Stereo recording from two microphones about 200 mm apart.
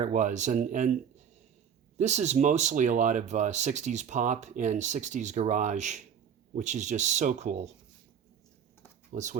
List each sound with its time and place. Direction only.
0.0 s speech: 40° right (ahead or behind)
2.0 s speech: 35° right (ahead or behind)
9.1 s speech: 35° right (ahead or behind)